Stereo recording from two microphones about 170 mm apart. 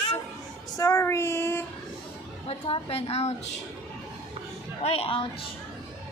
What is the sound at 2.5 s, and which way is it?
Speech, 35° left (ahead or behind).